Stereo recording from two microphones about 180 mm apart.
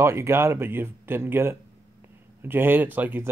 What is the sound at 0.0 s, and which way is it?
Speech, 15° right (ahead or behind).